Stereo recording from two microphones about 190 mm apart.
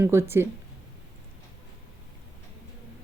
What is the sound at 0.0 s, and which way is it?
Speech, 15° right (ahead or behind).